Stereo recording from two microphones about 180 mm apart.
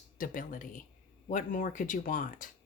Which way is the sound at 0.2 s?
50° left (ahead or behind).